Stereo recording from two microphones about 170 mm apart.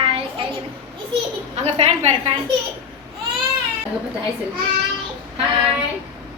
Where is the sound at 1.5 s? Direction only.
40° right (ahead or behind).